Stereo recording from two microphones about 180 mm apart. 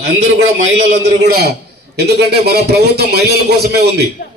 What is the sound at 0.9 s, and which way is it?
A man's voice, 60° right (ahead or behind).